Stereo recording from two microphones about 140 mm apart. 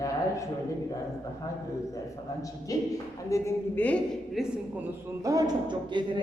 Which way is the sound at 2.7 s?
25° left (ahead or behind).